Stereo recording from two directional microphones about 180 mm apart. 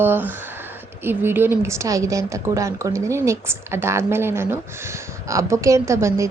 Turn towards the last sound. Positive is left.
turn(degrees=-15)  # may be behind; listen again after turning